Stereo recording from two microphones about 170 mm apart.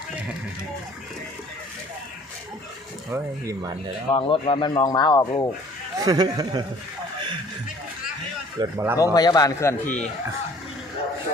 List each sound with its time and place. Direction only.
3.1 s speech: 20° right (ahead or behind)
4.1 s speech: 35° left (ahead or behind)
6.0 s speech: 25° right (ahead or behind)
8.6 s speech: 25° right (ahead or behind)
9.0 s a man's voice: 25° left (ahead or behind)